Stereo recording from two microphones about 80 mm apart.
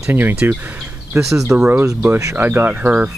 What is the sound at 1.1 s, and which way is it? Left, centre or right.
Speech, right.